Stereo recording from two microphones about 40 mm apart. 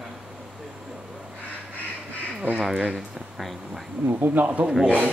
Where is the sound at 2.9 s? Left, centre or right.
Centre.